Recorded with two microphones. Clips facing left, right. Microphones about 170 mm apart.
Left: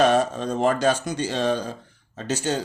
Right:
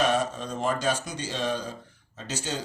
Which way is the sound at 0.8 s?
55° left (ahead or behind).